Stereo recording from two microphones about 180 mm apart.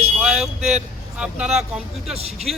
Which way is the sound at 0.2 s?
Centre (ahead or behind).